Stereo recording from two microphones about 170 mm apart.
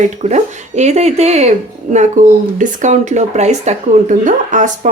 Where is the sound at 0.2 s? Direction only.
40° right (ahead or behind).